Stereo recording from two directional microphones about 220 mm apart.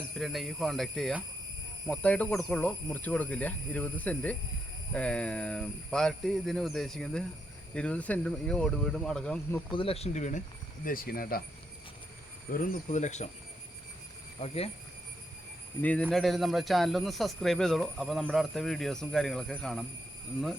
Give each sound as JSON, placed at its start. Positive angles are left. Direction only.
{"t": 0.2, "sound": "speech", "side_deg": 0}
{"t": 9.7, "sound": "speech", "side_deg": 25}
{"t": 12.5, "sound": "speech", "side_deg": 40}
{"t": 14.4, "sound": "speech", "side_deg": 25}
{"t": 15.8, "sound": "speech", "side_deg": 5}